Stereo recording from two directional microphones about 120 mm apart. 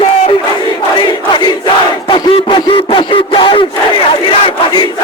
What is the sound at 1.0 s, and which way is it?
Crowd, 40° left (ahead or behind).